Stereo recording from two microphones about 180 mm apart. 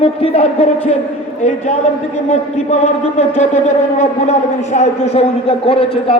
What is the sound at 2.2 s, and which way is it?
A man's voice, 40° left (ahead or behind).